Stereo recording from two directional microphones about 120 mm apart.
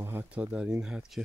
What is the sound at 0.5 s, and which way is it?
Speech, 10° right (ahead or behind).